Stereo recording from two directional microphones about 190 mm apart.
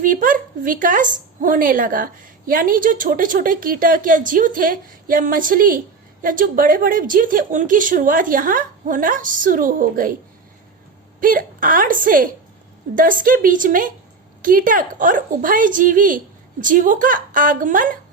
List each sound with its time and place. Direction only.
0.0 s a woman's voice: 45° right (ahead or behind)
11.2 s a woman's voice: 45° right (ahead or behind)